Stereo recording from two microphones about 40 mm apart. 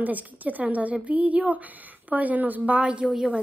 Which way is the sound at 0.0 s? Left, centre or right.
Right.